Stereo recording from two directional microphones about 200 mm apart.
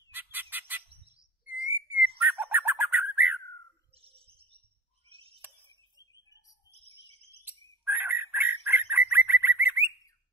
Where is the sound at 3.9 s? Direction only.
30° right (ahead or behind).